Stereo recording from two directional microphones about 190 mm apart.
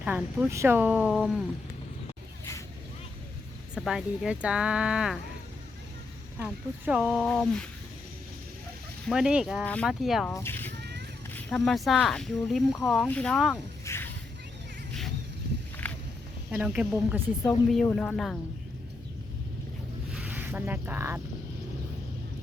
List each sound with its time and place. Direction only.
0.0 s speech: 5° right (ahead or behind)
3.8 s speech: centre (ahead or behind)
6.4 s speech: 5° right (ahead or behind)
9.0 s speech: 5° right (ahead or behind)
10.2 s speech: 10° left (ahead or behind)
10.8 s a sound: 60° right (ahead or behind)
11.3 s speech: 5° left (ahead or behind)
15.8 s a sound: 10° left (ahead or behind)
16.5 s speech: 5° right (ahead or behind)
17.8 s speech: 10° left (ahead or behind)
20.1 s speech: 10° right (ahead or behind)